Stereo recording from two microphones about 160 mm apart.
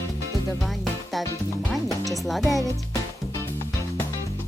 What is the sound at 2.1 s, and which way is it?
Speech, centre (ahead or behind).